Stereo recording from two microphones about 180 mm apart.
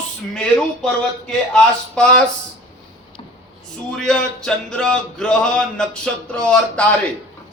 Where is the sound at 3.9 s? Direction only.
5° left (ahead or behind).